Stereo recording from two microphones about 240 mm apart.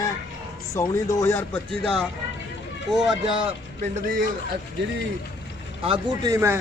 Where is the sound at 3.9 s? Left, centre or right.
Right.